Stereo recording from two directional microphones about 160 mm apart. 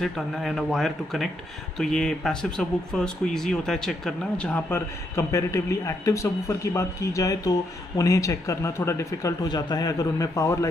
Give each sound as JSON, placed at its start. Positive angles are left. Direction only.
{"t": 0.0, "sound": "a man's voice", "side_deg": 0}